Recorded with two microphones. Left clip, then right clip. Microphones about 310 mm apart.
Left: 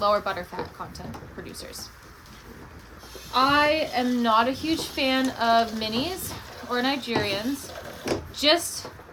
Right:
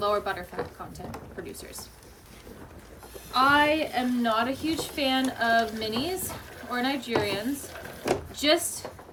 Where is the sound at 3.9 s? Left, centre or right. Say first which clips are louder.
Left 4 dB; centre.